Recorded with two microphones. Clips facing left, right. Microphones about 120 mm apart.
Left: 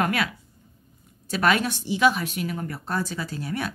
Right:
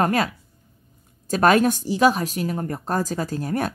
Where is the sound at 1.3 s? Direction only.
40° right (ahead or behind).